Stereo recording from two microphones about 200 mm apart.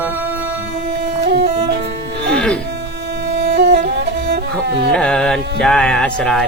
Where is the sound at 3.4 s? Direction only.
55° right (ahead or behind).